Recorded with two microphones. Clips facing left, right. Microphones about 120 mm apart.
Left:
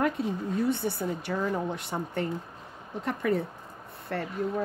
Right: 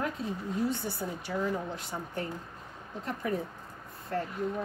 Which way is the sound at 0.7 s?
65° left (ahead or behind).